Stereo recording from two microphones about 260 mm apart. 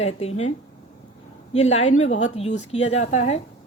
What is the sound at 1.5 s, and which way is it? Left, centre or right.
A woman's voice, left.